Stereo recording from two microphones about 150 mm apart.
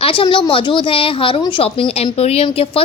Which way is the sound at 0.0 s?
35° left (ahead or behind).